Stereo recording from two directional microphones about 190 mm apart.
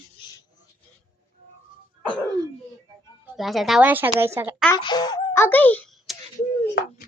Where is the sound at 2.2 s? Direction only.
20° right (ahead or behind).